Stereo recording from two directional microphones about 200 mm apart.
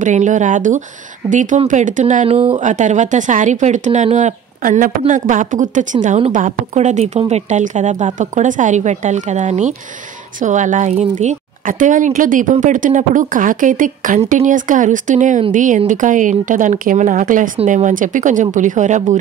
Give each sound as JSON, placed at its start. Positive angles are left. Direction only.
{"t": 0.0, "sound": "speech", "side_deg": -40}